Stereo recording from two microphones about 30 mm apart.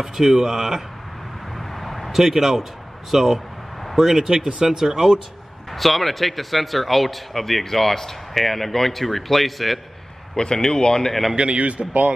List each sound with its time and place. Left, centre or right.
0.0 s speech: centre
1.6 s a sound: centre
2.1 s speech: centre
4.5 s speech: centre
5.7 s speech: centre
10.3 s speech: left
11.1 s speech: centre
11.3 s a man's voice: right